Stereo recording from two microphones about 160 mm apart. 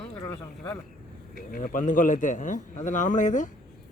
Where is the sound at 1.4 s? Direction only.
60° left (ahead or behind).